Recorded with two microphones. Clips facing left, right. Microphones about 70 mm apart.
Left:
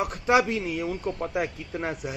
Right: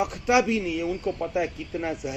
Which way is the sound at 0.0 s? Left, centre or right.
Left.